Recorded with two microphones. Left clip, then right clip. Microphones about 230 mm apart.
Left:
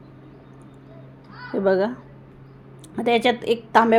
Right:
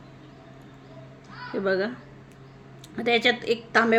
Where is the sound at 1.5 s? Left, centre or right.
Centre.